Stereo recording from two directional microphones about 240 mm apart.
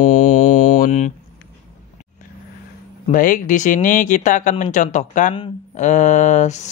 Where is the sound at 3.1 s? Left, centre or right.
Left.